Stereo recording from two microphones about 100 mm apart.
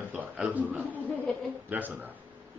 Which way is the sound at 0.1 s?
15° right (ahead or behind).